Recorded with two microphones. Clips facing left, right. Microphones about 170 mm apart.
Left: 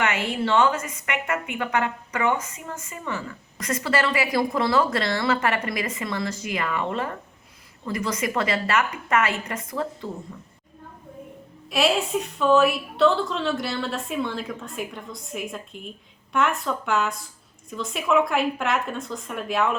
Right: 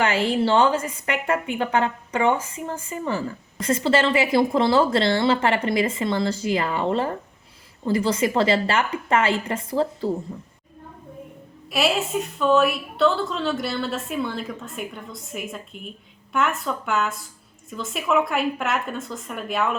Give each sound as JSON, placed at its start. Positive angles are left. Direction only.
{"t": 0.0, "sound": "a woman's voice", "side_deg": -30}
{"t": 11.7, "sound": "a woman's voice", "side_deg": 0}